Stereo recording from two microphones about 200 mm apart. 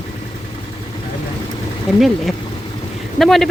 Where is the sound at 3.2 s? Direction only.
Centre (ahead or behind).